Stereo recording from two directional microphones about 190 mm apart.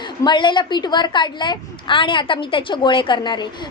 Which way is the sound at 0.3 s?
25° left (ahead or behind).